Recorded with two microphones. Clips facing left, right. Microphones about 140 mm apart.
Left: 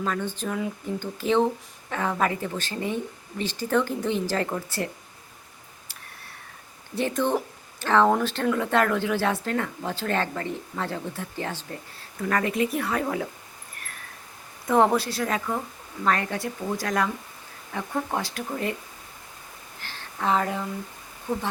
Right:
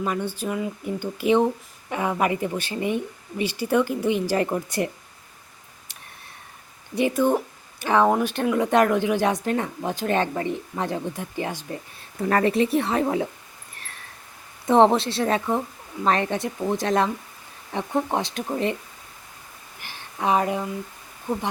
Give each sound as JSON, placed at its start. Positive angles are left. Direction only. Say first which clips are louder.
{"t": 0.0, "sound": "speech", "louder": "right 2 dB", "side_deg": -15}
{"t": 6.9, "sound": "speech", "louder": "right 4 dB", "side_deg": -10}
{"t": 12.2, "sound": "speech", "louder": "right 4 dB", "side_deg": -35}
{"t": 13.8, "sound": "a sound", "louder": "even", "side_deg": -25}
{"t": 14.7, "sound": "speech", "louder": "right 4 dB", "side_deg": -25}
{"t": 19.8, "sound": "a sound", "louder": "right 2 dB", "side_deg": -15}